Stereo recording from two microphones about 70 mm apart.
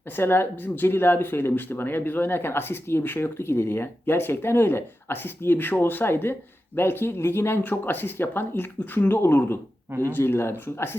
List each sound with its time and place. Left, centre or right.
0.2 s speech: left